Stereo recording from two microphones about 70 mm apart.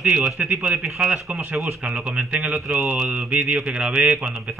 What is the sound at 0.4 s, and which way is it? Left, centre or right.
Speech, right.